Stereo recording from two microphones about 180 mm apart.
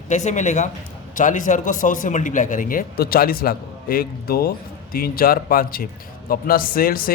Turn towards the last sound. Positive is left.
turn(degrees=55)  # may be behind; listen again after turning